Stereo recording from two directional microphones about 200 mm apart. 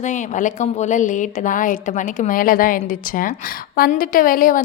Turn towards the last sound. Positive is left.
turn(degrees=45)  # may be behind; listen again after turning